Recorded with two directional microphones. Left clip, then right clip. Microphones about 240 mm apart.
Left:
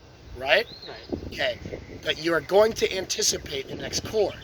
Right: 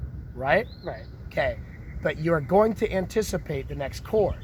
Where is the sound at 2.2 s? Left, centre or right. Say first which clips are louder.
Left 1 dB; centre.